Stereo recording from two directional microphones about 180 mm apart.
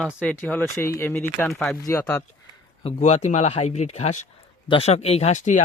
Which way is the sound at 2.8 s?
35° left (ahead or behind).